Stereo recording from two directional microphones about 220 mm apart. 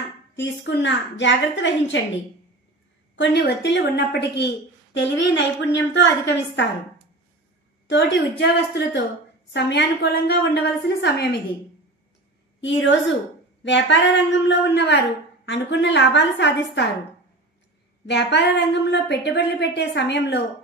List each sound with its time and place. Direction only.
0.4 s a woman's voice: 55° left (ahead or behind)
3.2 s a woman's voice: 50° left (ahead or behind)
7.9 s a woman's voice: 50° left (ahead or behind)
12.5 s a woman's voice: 55° left (ahead or behind)
18.0 s a woman's voice: 50° left (ahead or behind)